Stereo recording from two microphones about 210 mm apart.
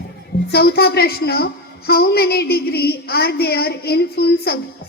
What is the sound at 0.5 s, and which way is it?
A woman's voice, 50° left (ahead or behind).